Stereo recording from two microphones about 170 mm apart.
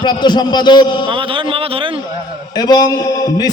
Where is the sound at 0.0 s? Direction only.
25° left (ahead or behind).